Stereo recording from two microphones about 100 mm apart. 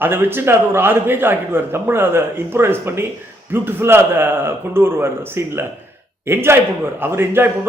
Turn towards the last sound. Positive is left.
turn(degrees=-25)  # may be behind; listen again after turning